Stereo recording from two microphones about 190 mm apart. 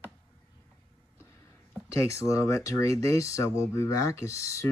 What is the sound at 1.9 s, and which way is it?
Speech, 15° left (ahead or behind).